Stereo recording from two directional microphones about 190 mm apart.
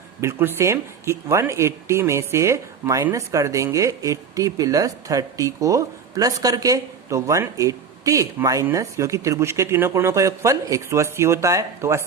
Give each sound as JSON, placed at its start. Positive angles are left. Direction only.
{"t": 0.2, "sound": "speech", "side_deg": -15}